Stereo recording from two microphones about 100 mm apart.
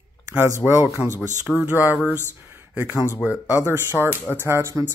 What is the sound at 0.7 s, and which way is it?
Speech, 25° right (ahead or behind).